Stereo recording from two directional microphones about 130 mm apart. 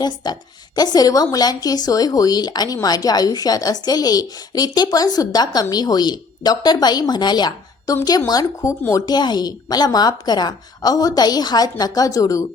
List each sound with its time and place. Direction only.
0.2 s a woman's voice: 30° left (ahead or behind)